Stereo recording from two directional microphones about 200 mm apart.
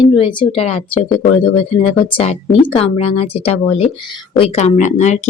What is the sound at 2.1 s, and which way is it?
Speech, 25° left (ahead or behind).